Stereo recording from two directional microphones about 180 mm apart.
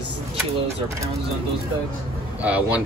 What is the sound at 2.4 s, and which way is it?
Speech, 10° right (ahead or behind).